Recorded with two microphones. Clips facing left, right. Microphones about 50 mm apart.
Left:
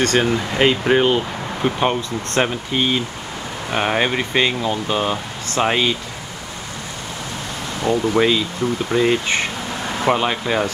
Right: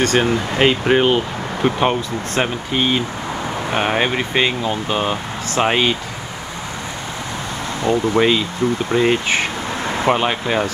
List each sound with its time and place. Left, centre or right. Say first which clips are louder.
0.2 s speech: right 1 dB; centre
7.8 s speech: right 1 dB; right; by 10.7 s centre